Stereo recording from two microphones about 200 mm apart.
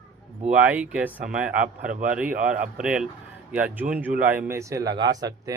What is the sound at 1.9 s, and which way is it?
Speech, 40° right (ahead or behind).